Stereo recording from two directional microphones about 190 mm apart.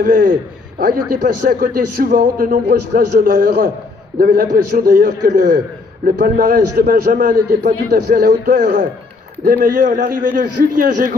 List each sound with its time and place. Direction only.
0.0 s a man's voice: 50° right (ahead or behind)